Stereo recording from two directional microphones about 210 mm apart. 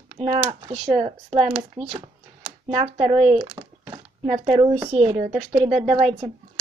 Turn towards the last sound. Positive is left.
turn(degrees=-30)  # may be behind; listen again after turning